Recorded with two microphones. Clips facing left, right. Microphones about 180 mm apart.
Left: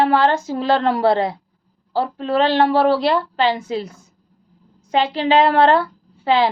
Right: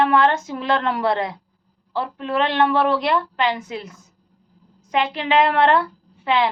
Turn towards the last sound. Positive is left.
turn(degrees=30)  # may be behind; listen again after turning